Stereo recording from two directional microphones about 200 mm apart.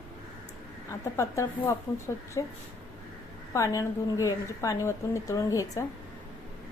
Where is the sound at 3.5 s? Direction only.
15° left (ahead or behind).